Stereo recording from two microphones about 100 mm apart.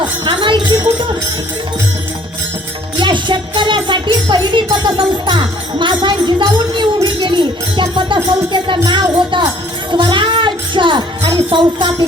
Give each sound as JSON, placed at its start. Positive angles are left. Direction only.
{"t": 0.0, "sound": "a sound", "side_deg": -50}
{"t": 3.0, "sound": "music", "side_deg": -50}
{"t": 11.5, "sound": "jingle bell", "side_deg": -55}